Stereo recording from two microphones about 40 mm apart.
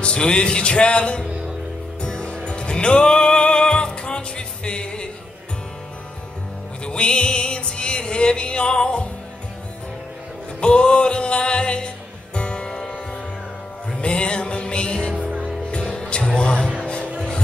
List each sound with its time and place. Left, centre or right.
0.0 s music: left
6.8 s music: left
10.6 s music: left
14.0 s music: left